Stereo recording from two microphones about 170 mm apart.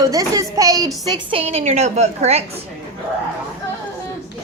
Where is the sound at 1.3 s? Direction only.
35° right (ahead or behind).